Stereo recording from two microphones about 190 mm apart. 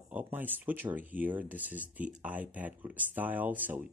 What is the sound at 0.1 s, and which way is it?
Speech, 10° right (ahead or behind).